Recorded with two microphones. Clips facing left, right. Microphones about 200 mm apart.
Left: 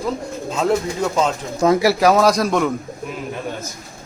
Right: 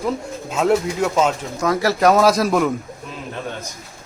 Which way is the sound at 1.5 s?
25° left (ahead or behind).